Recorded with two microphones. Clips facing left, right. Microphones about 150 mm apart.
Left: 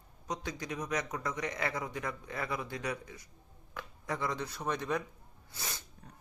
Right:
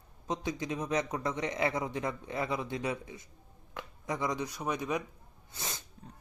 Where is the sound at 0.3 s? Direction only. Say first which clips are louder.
Right 4 dB; 20° right (ahead or behind).